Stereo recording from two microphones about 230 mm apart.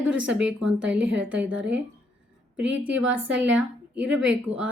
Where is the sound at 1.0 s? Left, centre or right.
Right.